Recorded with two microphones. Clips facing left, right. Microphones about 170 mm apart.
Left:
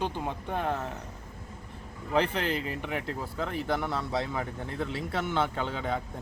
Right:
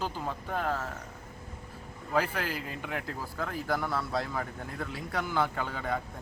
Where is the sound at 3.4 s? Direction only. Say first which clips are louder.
Left 1 dB; centre (ahead or behind).